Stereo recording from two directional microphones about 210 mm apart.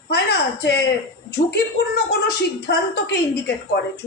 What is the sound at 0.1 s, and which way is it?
A woman's voice, 50° left (ahead or behind).